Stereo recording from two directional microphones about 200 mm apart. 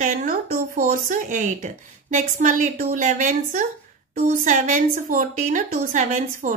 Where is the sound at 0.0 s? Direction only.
40° right (ahead or behind).